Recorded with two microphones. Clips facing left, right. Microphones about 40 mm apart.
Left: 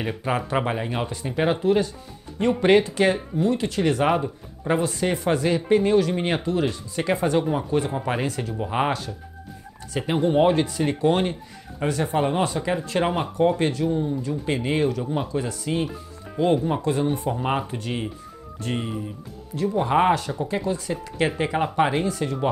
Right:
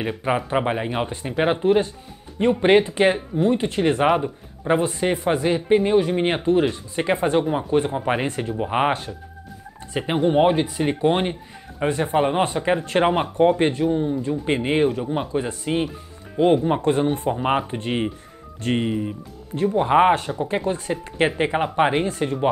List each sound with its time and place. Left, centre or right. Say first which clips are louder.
0.3 s speech: right 3 dB; right
17.3 s speech: right 3 dB; right